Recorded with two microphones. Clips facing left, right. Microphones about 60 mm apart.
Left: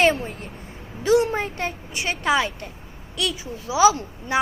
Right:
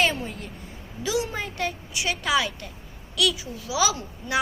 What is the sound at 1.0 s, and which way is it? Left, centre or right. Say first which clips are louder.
A woman's voice: left 8 dB; left.